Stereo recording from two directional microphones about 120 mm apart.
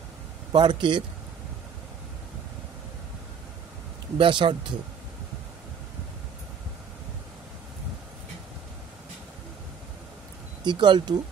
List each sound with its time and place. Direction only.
0.5 s speech: 40° right (ahead or behind)
4.2 s speech: 45° right (ahead or behind)
10.6 s speech: 40° right (ahead or behind)